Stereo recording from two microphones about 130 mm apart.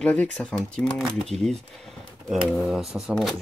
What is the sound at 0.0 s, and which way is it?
Speech, 10° left (ahead or behind).